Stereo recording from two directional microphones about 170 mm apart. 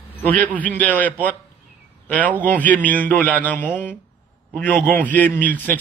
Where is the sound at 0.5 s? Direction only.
10° left (ahead or behind).